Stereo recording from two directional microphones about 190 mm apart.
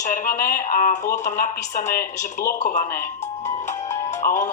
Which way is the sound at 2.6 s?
45° left (ahead or behind).